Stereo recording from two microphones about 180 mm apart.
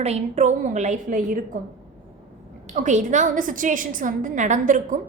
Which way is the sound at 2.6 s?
45° right (ahead or behind).